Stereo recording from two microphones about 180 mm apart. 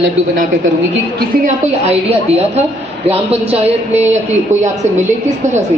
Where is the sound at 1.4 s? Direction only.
40° right (ahead or behind).